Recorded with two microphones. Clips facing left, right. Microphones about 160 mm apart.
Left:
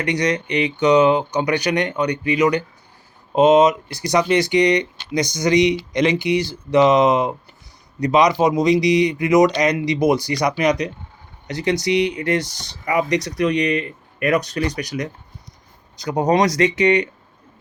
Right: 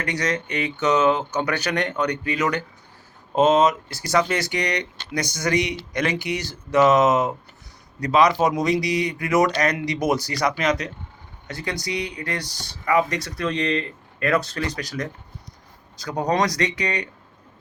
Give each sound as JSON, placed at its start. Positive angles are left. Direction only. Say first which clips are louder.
{"t": 0.0, "sound": "speech", "louder": "left 5 dB", "side_deg": 15}